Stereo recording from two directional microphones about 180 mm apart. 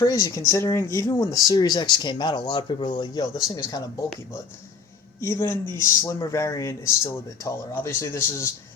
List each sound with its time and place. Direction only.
0.0 s speech: 20° left (ahead or behind)
5.2 s speech: 15° left (ahead or behind)